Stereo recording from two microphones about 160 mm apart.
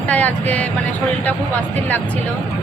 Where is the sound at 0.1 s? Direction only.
10° left (ahead or behind).